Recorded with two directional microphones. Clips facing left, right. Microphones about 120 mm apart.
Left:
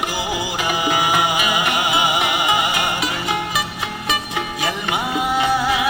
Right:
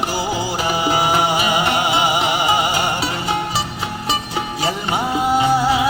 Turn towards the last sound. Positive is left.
turn(degrees=-35)  # may be behind; listen again after turning